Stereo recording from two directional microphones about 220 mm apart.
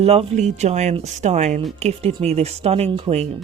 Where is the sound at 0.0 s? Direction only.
30° right (ahead or behind).